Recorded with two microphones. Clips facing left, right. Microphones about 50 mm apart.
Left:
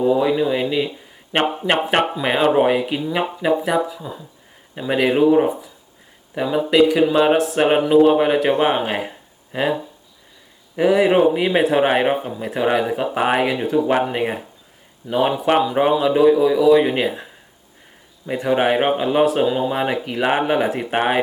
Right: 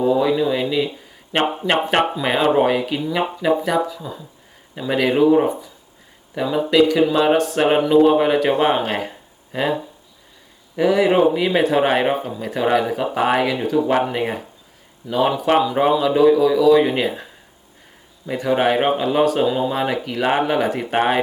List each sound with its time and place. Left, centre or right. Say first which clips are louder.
0.0 s speech: even; centre
1.3 s speech: even; left
1.7 s speech: even; centre
3.0 s speech: even; centre
10.8 s speech: left 1 dB; centre
18.3 s speech: even; centre